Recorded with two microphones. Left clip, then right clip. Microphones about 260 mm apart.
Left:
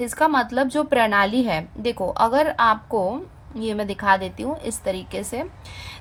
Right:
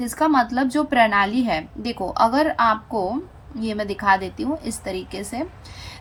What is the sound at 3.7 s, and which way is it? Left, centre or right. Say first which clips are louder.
A woman's voice: even; left.